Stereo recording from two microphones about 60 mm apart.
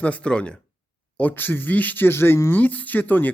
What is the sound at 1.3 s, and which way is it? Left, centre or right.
Speech, left.